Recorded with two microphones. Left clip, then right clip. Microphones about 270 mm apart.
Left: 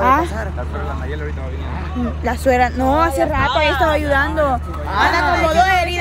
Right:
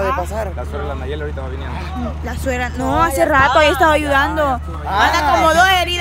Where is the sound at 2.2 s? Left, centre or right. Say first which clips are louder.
Left 8 dB; centre.